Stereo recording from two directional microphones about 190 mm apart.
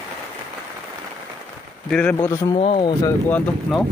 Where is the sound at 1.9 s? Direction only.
5° left (ahead or behind).